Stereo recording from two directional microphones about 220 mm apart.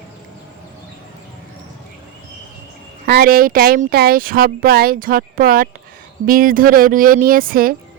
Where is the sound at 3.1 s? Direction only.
45° right (ahead or behind).